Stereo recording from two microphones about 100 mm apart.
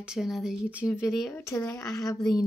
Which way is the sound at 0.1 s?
5° right (ahead or behind).